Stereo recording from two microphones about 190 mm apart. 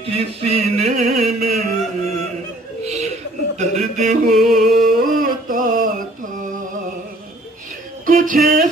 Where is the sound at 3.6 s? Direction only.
40° right (ahead or behind).